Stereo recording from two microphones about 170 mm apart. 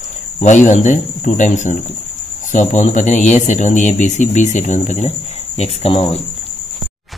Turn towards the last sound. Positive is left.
turn(degrees=35)  # may be behind; listen again after turning